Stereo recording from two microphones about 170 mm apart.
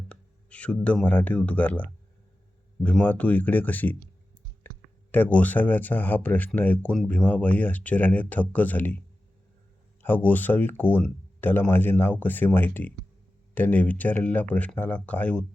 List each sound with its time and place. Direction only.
0.1 s speech: 5° left (ahead or behind)
2.8 s speech: 10° left (ahead or behind)
4.7 s clicking: 10° left (ahead or behind)
5.1 s speech: 10° left (ahead or behind)
10.0 s speech: 10° left (ahead or behind)